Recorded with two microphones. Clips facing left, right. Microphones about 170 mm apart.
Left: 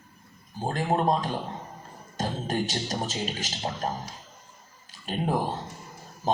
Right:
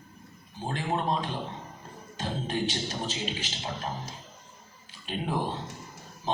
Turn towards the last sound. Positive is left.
turn(degrees=45)  # may be behind; listen again after turning